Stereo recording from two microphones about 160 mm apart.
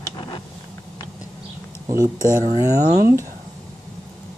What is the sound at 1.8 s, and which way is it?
Speech, 20° right (ahead or behind).